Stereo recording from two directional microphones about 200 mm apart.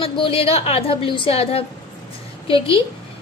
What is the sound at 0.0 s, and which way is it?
A woman's voice, 25° left (ahead or behind).